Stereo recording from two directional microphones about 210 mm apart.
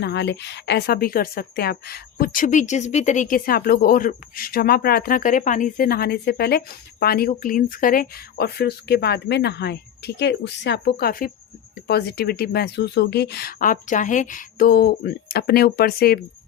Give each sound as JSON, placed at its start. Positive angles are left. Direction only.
{"t": 0.0, "sound": "a woman's voice", "side_deg": 55}